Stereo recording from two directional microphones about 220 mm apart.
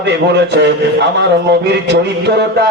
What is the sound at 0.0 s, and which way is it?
A man's voice, 50° right (ahead or behind).